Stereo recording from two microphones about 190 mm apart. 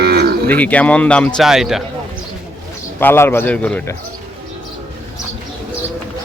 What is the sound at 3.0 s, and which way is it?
Speech, 10° left (ahead or behind).